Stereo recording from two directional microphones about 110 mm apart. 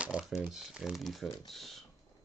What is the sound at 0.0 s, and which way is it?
Speech, 5° right (ahead or behind).